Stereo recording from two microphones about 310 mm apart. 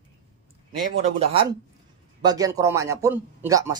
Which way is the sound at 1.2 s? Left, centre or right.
Centre.